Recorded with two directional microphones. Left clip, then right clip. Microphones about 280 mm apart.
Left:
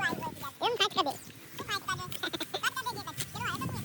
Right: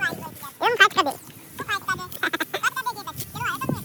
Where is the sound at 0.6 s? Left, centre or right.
Centre.